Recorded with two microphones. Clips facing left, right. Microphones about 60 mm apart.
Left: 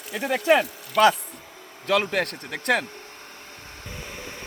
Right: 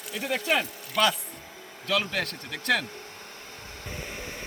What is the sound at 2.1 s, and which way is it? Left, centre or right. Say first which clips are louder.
Speech: left 5 dB; left.